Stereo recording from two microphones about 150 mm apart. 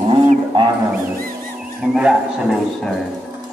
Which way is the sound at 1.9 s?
5° right (ahead or behind).